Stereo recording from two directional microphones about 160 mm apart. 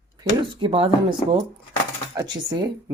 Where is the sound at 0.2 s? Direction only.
35° right (ahead or behind).